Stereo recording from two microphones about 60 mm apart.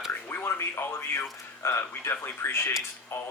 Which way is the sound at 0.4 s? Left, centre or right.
Left.